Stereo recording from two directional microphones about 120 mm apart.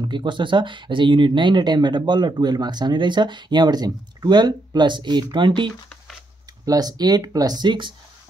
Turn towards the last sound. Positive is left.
turn(degrees=-40)  # may be behind; listen again after turning